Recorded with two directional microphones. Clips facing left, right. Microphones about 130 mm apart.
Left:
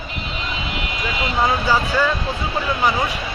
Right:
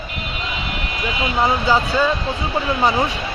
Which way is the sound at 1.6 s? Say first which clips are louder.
Right 1 dB; 15° right (ahead or behind).